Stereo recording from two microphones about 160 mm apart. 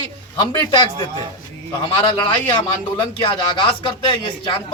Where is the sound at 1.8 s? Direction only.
30° left (ahead or behind).